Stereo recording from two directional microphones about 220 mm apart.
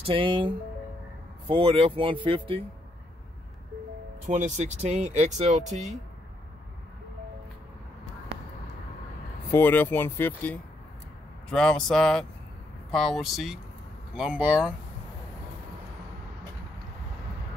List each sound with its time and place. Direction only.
0.0 s speech: 25° right (ahead or behind)
4.3 s speech: 35° right (ahead or behind)
9.5 s speech: 10° left (ahead or behind)